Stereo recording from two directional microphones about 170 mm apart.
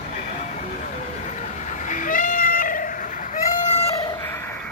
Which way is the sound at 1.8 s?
50° left (ahead or behind).